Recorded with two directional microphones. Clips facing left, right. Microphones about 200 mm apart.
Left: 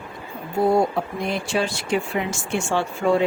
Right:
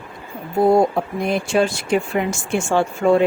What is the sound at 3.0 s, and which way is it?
Speech, 50° right (ahead or behind).